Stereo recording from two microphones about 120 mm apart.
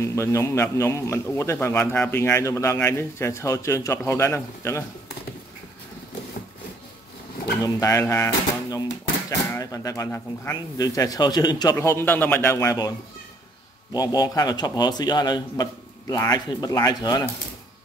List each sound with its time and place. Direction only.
0.0 s a man's voice: 25° left (ahead or behind)
7.6 s a man's voice: 25° left (ahead or behind)
11.7 s a man's voice: 20° left (ahead or behind)
13.9 s a man's voice: 30° left (ahead or behind)